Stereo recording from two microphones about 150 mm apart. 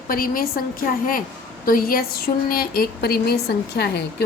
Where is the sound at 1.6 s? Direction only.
70° left (ahead or behind).